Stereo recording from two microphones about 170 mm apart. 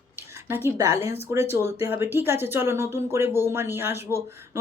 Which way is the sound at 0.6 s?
20° right (ahead or behind).